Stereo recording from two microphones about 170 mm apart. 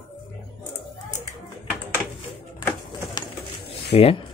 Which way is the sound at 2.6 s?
15° left (ahead or behind).